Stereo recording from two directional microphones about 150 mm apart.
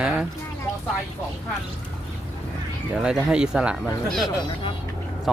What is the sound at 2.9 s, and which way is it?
Speech, 5° right (ahead or behind).